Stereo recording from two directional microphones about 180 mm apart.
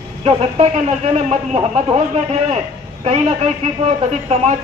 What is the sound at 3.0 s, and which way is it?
Speech, 35° right (ahead or behind).